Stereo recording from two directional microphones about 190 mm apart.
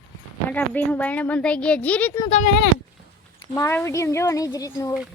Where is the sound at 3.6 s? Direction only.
15° left (ahead or behind).